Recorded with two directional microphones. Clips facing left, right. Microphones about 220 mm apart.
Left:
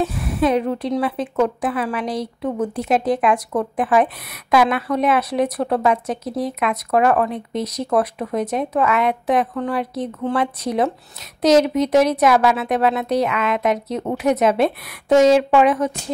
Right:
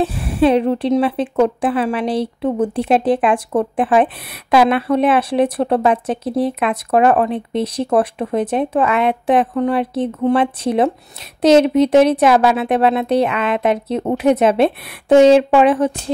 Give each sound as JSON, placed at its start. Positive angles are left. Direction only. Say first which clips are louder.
{"t": 0.0, "sound": "a woman's voice", "louder": "right 4 dB", "side_deg": -30}